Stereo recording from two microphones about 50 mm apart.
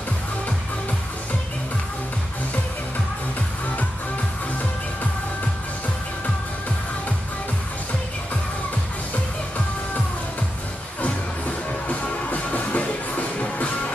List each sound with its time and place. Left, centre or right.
11.0 s music: left